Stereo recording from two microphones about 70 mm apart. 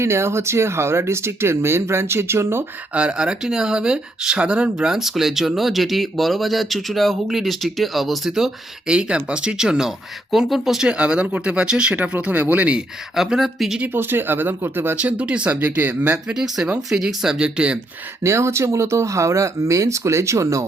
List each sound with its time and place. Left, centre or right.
0.0 s speech: right
2.9 s speech: centre
13.1 s speech: centre
13.7 s speech: right
14.9 s speech: centre
16.2 s speech: centre
18.2 s speech: right